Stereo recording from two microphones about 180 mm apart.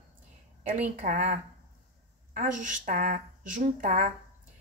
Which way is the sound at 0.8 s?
40° right (ahead or behind).